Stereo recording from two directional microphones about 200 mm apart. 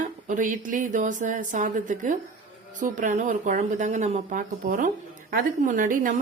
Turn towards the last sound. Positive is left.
turn(degrees=-40)  # may be behind; listen again after turning